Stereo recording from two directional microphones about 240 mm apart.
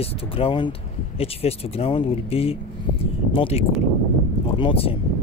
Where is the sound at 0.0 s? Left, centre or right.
Left.